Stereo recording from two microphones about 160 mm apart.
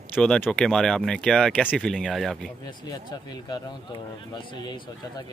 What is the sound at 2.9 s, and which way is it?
Speech, 25° left (ahead or behind).